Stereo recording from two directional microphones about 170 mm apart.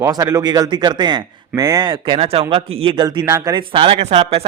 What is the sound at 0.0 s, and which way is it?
A man's voice, 20° right (ahead or behind).